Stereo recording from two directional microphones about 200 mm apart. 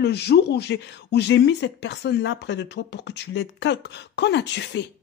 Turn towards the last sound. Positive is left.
turn(degrees=60)  # may be behind; listen again after turning